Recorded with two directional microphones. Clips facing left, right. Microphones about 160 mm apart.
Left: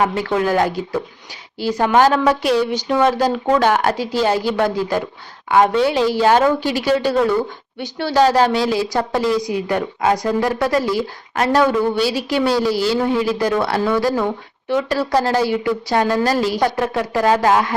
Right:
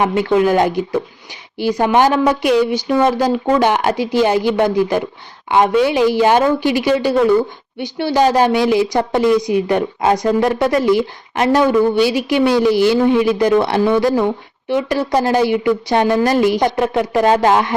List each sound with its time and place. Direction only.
0.0 s speech: 20° right (ahead or behind)